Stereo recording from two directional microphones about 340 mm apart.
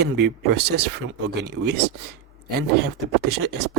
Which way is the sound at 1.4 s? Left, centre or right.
Right.